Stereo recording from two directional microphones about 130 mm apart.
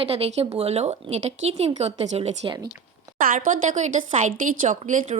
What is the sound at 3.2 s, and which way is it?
A woman's voice, 85° right.